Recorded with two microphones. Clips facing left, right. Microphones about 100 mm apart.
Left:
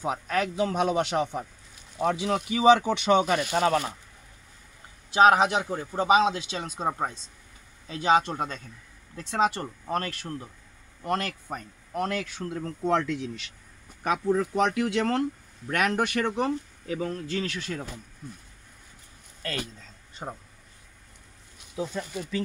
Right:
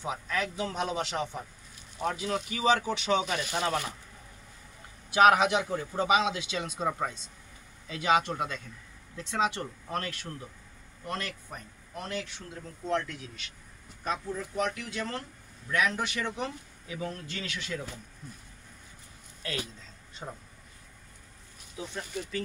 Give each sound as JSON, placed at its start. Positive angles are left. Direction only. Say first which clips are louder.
{"t": 0.0, "sound": "speech", "louder": "left 5 dB", "side_deg": 50}
{"t": 2.0, "sound": "speech", "louder": "left 5 dB", "side_deg": 80}
{"t": 5.1, "sound": "a man's voice", "louder": "left 2 dB", "side_deg": 30}
{"t": 12.5, "sound": "speech", "louder": "left 5 dB", "side_deg": 90}
{"t": 14.0, "sound": "speech", "louder": "left 9 dB", "side_deg": 75}
{"t": 20.2, "sound": "a man's voice", "louder": "left 4 dB", "side_deg": 40}